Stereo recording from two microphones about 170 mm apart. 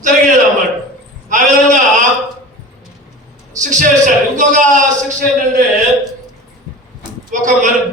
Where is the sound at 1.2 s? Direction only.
45° right (ahead or behind).